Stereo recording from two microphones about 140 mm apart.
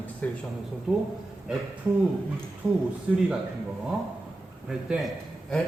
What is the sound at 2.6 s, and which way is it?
Speech, 10° right (ahead or behind).